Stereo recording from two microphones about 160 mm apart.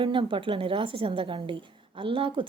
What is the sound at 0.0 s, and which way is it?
Speech, 30° right (ahead or behind).